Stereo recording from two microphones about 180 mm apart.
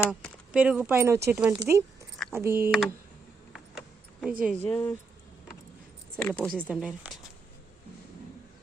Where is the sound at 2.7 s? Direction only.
Centre (ahead or behind).